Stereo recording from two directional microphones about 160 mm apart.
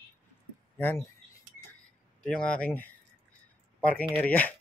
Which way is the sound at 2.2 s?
5° left (ahead or behind).